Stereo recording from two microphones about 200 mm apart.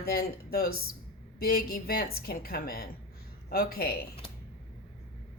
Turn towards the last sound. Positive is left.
turn(degrees=50)  # may be behind; listen again after turning